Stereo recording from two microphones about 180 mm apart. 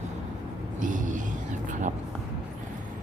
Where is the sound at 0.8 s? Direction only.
45° right (ahead or behind).